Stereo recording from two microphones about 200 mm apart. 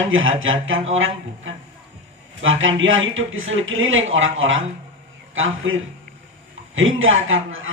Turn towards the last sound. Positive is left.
turn(degrees=-80)